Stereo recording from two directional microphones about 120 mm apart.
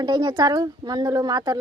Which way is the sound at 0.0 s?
40° right (ahead or behind).